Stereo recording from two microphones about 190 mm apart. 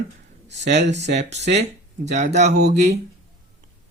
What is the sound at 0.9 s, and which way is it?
Speech, 35° right (ahead or behind).